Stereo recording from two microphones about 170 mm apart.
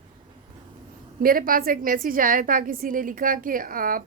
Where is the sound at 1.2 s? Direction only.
55° right (ahead or behind).